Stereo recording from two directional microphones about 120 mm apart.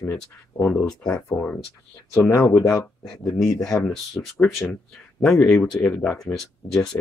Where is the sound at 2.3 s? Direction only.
20° left (ahead or behind).